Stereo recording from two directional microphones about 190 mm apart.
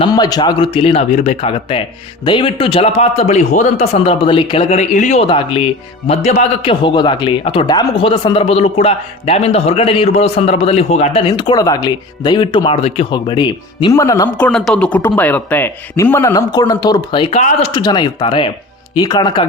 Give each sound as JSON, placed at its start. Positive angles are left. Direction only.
{"t": 0.0, "sound": "a man's voice", "side_deg": 20}
{"t": 11.3, "sound": "speech", "side_deg": 25}